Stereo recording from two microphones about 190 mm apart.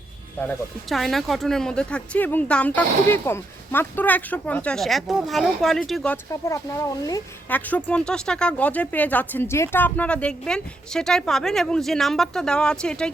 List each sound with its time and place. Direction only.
0.4 s speech: centre (ahead or behind)
6.5 s speech: 15° left (ahead or behind)
7.5 s speech: 5° left (ahead or behind)